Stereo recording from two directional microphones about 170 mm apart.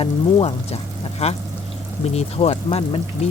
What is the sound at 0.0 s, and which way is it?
Speech, 35° left (ahead or behind).